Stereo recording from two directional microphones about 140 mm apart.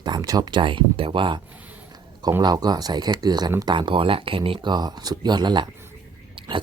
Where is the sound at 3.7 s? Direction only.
35° right (ahead or behind).